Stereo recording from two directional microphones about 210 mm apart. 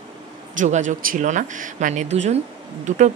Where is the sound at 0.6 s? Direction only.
35° right (ahead or behind).